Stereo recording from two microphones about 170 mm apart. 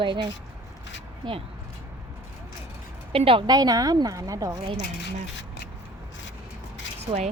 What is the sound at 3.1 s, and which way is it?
A woman's voice, 35° right (ahead or behind).